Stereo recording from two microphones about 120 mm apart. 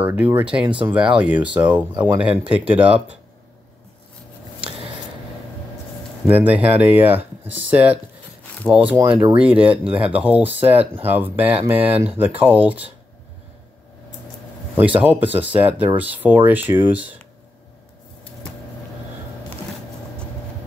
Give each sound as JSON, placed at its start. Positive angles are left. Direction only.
{"t": 0.0, "sound": "speech", "side_deg": -15}
{"t": 6.2, "sound": "speech", "side_deg": -15}
{"t": 9.3, "sound": "speech", "side_deg": -10}
{"t": 14.8, "sound": "speech", "side_deg": -15}